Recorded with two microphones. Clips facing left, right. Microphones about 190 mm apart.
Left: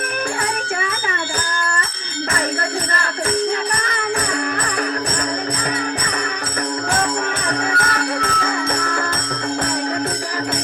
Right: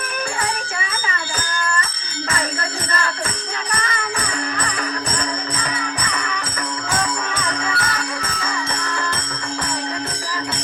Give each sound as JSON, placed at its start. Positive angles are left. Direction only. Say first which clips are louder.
{"t": 7.0, "sound": "music", "louder": "left 3 dB", "side_deg": 50}